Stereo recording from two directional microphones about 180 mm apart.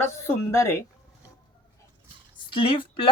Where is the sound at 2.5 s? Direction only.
30° left (ahead or behind).